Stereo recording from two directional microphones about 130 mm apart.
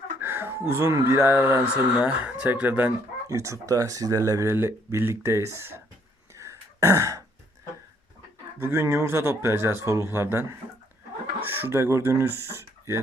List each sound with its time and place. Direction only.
0.2 s speech: 15° right (ahead or behind)
6.3 s throat clearing: 25° right (ahead or behind)
8.6 s speech: 25° right (ahead or behind)